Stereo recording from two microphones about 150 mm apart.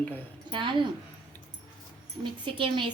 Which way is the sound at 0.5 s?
35° right (ahead or behind).